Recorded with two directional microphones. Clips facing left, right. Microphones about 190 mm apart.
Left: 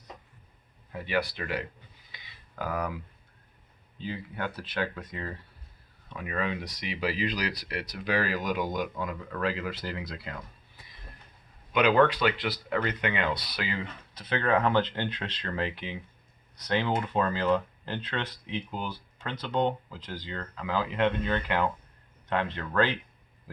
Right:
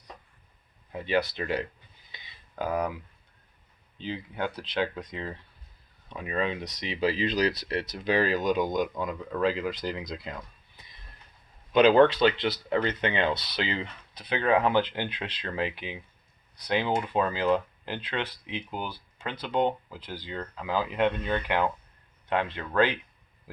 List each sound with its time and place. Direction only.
0.9 s speech: 20° right (ahead or behind)
2.1 s a sound: 20° right (ahead or behind)
3.9 s speech: 20° right (ahead or behind)
11.7 s speech: 30° right (ahead or behind); by 23.0 s 15° right (ahead or behind)